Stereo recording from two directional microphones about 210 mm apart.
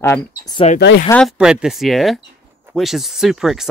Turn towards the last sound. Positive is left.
turn(degrees=0)  # may be behind; listen again after turning